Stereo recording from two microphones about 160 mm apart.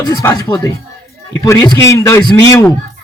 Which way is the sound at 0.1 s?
20° left (ahead or behind).